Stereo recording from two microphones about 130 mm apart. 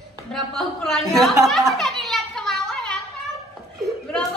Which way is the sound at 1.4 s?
Centre (ahead or behind).